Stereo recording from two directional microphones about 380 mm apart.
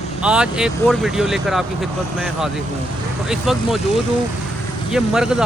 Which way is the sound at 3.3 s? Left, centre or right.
Centre.